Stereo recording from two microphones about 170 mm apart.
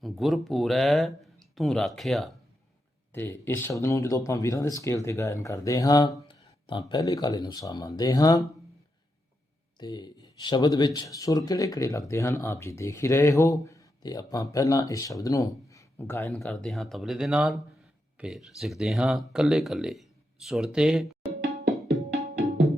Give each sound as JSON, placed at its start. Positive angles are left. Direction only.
{"t": 0.0, "sound": "speech", "side_deg": 0}
{"t": 3.1, "sound": "speech", "side_deg": 15}
{"t": 9.7, "sound": "speech", "side_deg": 25}
{"t": 16.3, "sound": "speech", "side_deg": 0}